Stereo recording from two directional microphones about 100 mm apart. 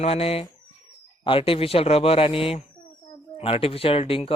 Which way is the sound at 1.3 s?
65° left (ahead or behind).